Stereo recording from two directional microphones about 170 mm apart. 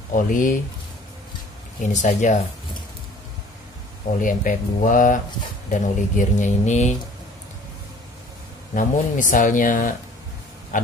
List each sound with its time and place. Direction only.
0.1 s speech: 50° left (ahead or behind)
1.8 s speech: 45° left (ahead or behind)
4.2 s speech: 50° left (ahead or behind)
8.7 s speech: 50° left (ahead or behind)